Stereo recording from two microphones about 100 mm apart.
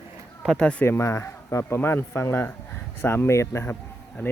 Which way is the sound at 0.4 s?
10° left (ahead or behind).